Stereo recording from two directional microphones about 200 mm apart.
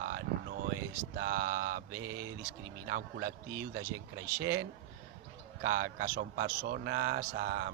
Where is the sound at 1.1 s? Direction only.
45° right (ahead or behind).